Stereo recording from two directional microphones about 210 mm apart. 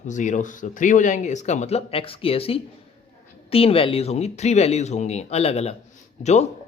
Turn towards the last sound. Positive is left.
turn(degrees=30)  # may be behind; listen again after turning